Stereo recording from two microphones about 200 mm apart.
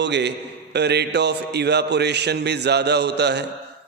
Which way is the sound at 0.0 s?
60° right (ahead or behind).